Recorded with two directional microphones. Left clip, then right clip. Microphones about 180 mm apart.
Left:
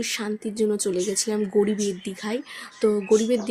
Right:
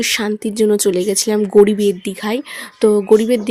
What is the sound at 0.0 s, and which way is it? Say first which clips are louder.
A woman's voice: right 10 dB; 55° right (ahead or behind).